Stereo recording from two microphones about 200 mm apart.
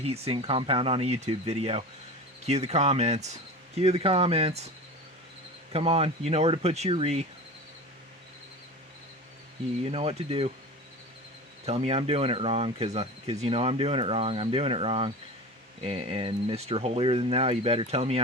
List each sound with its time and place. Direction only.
0.0 s speech: 30° right (ahead or behind)
5.7 s speech: 30° right (ahead or behind)
9.8 s speech: 30° right (ahead or behind)
11.6 s speech: 30° right (ahead or behind)